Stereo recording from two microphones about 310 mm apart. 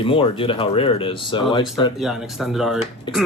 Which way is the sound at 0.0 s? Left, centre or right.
Centre.